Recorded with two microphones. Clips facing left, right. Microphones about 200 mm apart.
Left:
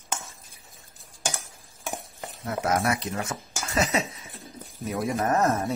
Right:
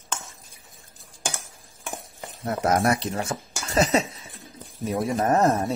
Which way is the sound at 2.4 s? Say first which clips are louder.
Right 4 dB; 35° right (ahead or behind).